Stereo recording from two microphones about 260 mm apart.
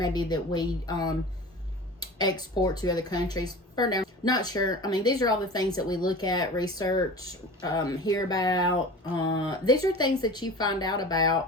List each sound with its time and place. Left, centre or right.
0.0 s speech: centre